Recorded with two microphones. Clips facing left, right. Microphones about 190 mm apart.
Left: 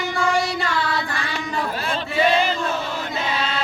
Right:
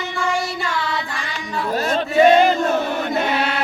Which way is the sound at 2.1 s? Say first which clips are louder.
Right 7 dB; 45° right (ahead or behind).